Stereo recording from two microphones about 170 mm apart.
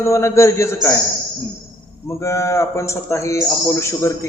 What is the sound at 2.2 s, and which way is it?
A man's voice, 15° left (ahead or behind).